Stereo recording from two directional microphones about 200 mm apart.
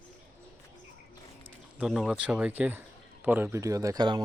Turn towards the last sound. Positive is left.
turn(degrees=-20)  # may be behind; listen again after turning